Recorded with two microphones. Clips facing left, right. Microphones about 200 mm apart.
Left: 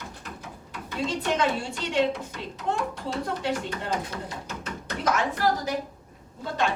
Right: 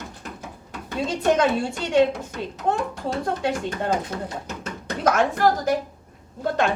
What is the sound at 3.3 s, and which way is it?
Speech, 50° right (ahead or behind).